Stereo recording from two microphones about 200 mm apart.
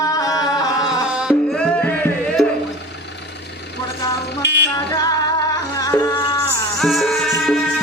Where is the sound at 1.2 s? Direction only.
Centre (ahead or behind).